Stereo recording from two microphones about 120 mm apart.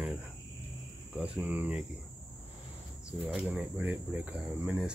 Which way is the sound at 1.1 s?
10° right (ahead or behind).